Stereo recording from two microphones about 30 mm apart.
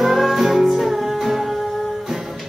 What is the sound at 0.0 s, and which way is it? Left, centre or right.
Music, centre.